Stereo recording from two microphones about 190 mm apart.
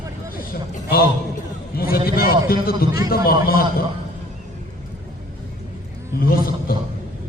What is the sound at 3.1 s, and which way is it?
Speech, 50° left (ahead or behind).